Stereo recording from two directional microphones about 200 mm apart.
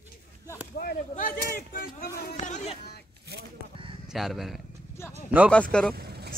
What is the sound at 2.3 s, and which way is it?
Speech, 35° left (ahead or behind).